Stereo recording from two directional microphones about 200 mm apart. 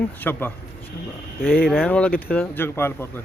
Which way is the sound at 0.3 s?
10° left (ahead or behind).